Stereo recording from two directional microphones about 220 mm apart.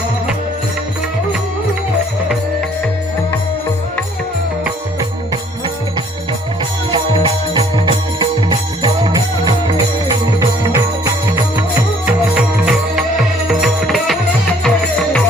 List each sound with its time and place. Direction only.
6.9 s music: 20° right (ahead or behind)
12.0 s music: 5° right (ahead or behind)